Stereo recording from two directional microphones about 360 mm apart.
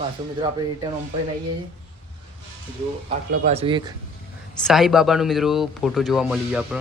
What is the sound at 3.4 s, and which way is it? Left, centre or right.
Speech, centre.